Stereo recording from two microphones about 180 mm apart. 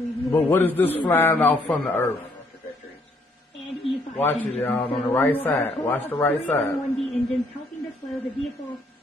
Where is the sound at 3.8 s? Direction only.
30° left (ahead or behind).